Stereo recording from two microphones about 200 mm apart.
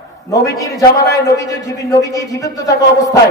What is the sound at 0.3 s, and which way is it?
A man's voice, 15° left (ahead or behind).